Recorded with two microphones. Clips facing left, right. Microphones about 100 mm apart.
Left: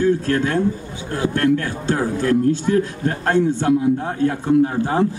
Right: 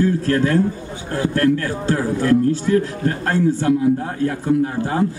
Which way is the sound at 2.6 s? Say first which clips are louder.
Right 1 dB; 30° left (ahead or behind).